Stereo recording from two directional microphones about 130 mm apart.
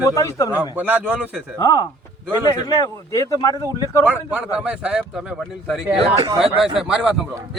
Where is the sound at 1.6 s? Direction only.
30° left (ahead or behind).